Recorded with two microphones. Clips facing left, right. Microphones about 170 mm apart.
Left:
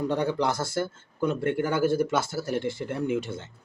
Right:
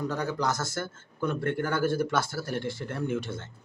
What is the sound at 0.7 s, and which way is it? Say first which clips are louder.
Speech: left 6 dB; 10° left (ahead or behind).